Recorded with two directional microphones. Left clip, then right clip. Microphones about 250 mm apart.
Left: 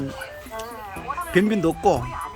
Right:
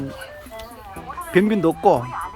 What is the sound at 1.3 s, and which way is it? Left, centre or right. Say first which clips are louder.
Speech: right 3 dB; centre.